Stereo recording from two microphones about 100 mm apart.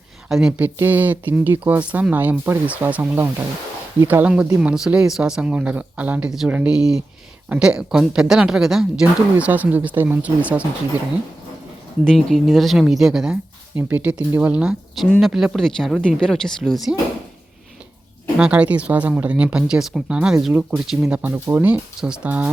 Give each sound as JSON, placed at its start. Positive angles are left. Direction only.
{"t": 0.3, "sound": "speech", "side_deg": -5}
{"t": 0.8, "sound": "speech", "side_deg": -20}
{"t": 9.5, "sound": "speech", "side_deg": -15}
{"t": 12.0, "sound": "speech", "side_deg": 5}
{"t": 18.3, "sound": "speech", "side_deg": -10}
{"t": 21.2, "sound": "speech", "side_deg": -15}